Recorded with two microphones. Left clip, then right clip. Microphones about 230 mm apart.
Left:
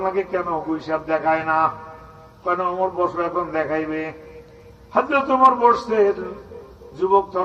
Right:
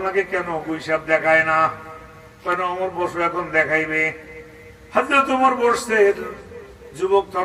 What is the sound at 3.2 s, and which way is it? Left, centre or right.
Speech, right.